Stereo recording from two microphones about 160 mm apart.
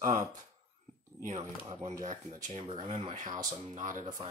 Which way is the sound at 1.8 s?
55° right (ahead or behind).